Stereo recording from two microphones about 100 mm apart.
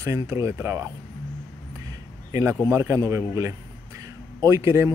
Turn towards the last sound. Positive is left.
turn(degrees=-30)  # may be behind; listen again after turning